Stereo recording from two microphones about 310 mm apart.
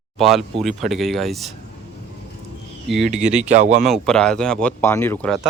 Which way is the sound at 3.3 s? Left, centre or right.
Right.